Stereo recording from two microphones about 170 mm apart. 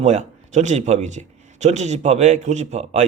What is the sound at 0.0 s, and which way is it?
Speech, 45° right (ahead or behind).